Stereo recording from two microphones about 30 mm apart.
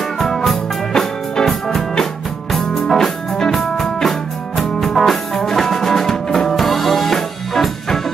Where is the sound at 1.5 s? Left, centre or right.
Centre.